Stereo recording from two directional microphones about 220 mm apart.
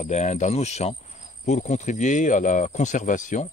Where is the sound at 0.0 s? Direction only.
30° left (ahead or behind).